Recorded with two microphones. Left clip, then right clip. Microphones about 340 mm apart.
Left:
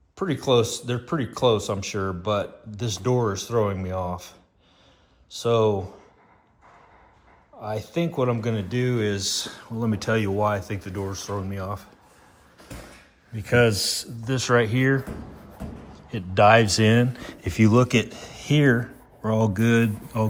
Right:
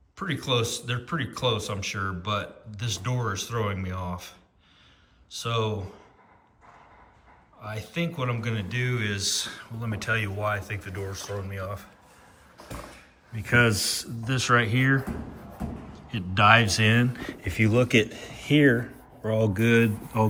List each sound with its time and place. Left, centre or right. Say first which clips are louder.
0.2 s speech: left 6 dB; centre
7.6 s speech: left 5 dB; centre
13.3 s a man's voice: left 2 dB; centre